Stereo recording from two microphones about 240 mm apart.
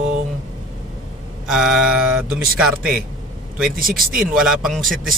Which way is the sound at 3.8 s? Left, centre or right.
Right.